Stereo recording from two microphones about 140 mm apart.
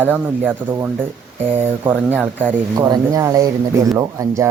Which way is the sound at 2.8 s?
25° right (ahead or behind).